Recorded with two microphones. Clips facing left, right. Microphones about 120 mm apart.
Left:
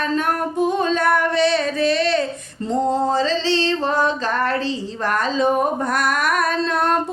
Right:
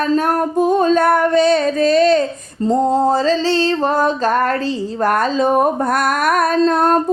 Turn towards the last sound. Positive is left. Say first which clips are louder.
# right 6 dB
turn(degrees=-40)  # may be behind; listen again after turning